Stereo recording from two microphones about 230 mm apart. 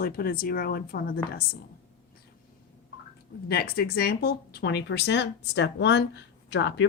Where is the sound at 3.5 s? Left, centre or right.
Left.